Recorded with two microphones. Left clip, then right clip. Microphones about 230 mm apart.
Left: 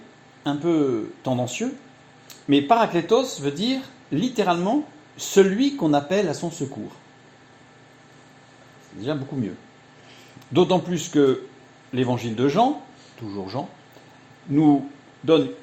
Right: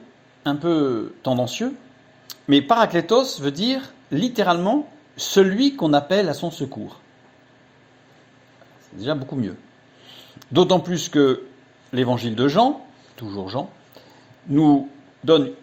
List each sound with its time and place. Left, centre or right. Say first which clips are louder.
0.4 s speech: right 1 dB; right
10.5 s a man's voice: right 2 dB; right